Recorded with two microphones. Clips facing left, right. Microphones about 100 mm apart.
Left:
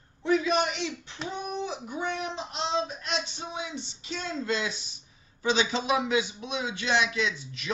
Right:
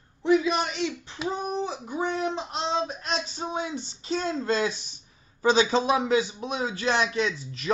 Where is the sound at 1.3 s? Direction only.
40° right (ahead or behind).